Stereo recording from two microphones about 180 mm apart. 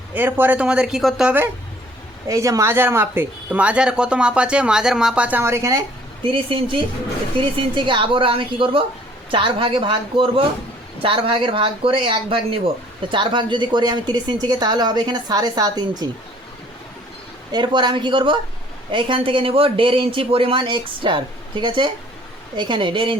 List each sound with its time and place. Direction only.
0.1 s speech: 10° right (ahead or behind)
6.3 s speech: 30° right (ahead or behind)
17.5 s speech: 25° right (ahead or behind)